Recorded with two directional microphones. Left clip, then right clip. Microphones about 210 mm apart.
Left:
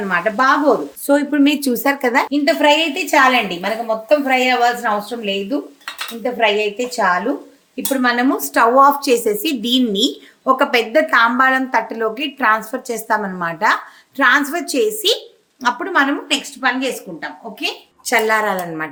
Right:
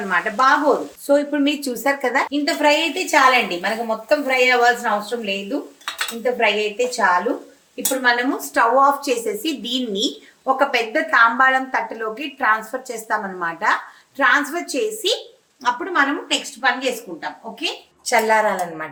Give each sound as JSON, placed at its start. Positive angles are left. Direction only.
{"t": 0.1, "sound": "a woman's voice", "side_deg": 50}
{"t": 6.6, "sound": "a woman's voice", "side_deg": 45}
{"t": 8.0, "sound": "a woman's voice", "side_deg": 55}